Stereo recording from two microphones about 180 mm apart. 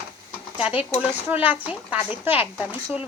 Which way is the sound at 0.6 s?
5° right (ahead or behind).